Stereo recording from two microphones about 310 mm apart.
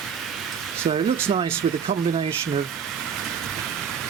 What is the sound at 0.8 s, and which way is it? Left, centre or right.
Speech, centre.